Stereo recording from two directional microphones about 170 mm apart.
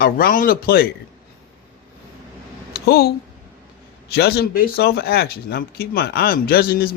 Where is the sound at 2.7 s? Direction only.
70° left (ahead or behind).